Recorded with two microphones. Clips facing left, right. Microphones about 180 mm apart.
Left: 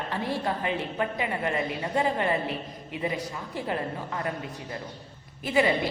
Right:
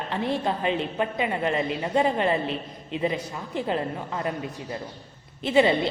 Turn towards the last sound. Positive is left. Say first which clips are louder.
# right 4 dB
turn(degrees=-25)  # may be behind; listen again after turning